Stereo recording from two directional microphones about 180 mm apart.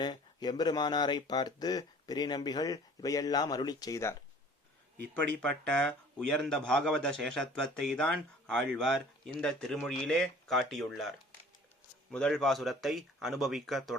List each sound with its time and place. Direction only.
0.0 s speech: 25° left (ahead or behind)
5.4 s speech: 5° left (ahead or behind)
12.1 s speech: 5° left (ahead or behind)